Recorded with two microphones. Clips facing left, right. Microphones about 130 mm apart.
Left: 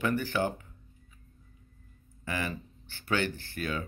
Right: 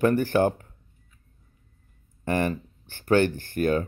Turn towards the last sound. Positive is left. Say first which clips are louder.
# right 11 dB
turn(degrees=-50)  # may be behind; listen again after turning